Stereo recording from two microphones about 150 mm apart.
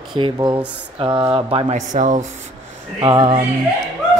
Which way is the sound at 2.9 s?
40° right (ahead or behind).